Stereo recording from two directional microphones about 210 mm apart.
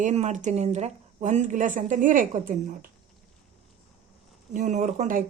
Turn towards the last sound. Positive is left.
turn(degrees=-40)  # may be behind; listen again after turning